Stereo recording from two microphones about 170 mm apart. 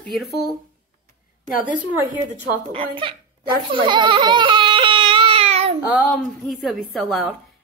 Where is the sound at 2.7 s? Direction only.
30° right (ahead or behind).